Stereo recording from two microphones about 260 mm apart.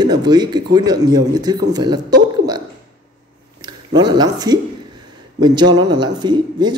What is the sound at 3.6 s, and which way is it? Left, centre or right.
Speech, centre.